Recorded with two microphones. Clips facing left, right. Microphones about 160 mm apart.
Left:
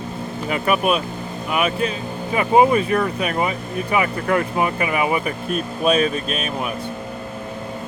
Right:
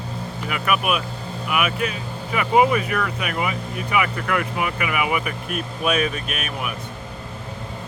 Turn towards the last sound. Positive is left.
turn(degrees=30)  # may be behind; listen again after turning